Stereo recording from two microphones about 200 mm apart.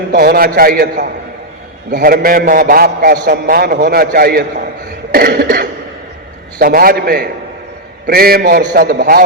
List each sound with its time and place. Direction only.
0.1 s a man's voice: 50° right (ahead or behind)